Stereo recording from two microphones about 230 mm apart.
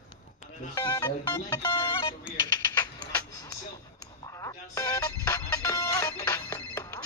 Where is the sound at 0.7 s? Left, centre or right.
Centre.